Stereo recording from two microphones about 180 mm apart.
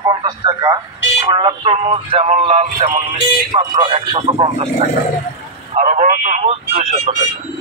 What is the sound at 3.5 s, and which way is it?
Speech, 25° right (ahead or behind).